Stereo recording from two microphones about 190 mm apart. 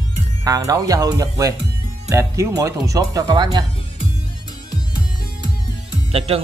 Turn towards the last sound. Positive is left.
turn(degrees=-30)  # may be behind; listen again after turning